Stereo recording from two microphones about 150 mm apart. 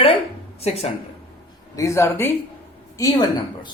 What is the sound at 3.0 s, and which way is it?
Speech, 30° left (ahead or behind).